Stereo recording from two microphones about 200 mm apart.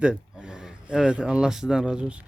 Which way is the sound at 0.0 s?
5° right (ahead or behind).